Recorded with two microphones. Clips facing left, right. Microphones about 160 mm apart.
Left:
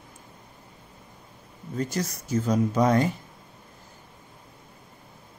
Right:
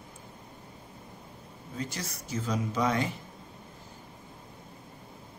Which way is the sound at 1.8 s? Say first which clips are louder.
Left 8 dB; 45° left (ahead or behind).